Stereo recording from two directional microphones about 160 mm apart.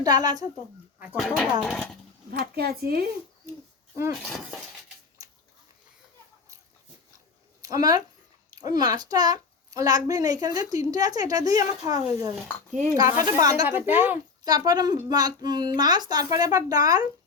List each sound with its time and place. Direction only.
0.0 s a child's voice: 25° right (ahead or behind)
1.0 s speech: centre (ahead or behind)
2.4 s speech: 75° right (ahead or behind)
4.2 s speech: centre (ahead or behind)
7.6 s a child's voice: 20° right (ahead or behind)
14.4 s a child's voice: 25° right (ahead or behind)